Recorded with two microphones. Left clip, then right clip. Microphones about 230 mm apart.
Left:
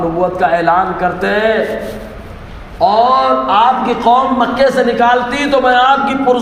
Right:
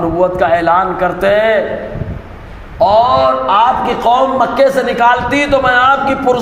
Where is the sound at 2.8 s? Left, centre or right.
Right.